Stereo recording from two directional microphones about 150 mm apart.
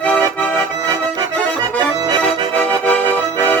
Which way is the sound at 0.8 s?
25° right (ahead or behind).